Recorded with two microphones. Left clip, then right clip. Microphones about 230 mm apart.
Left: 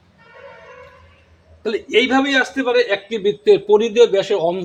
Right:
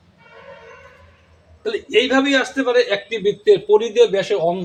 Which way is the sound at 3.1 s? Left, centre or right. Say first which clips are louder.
Left 1 dB; left.